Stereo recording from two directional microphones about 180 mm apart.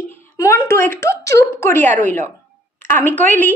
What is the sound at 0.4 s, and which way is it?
A woman's voice, 15° left (ahead or behind).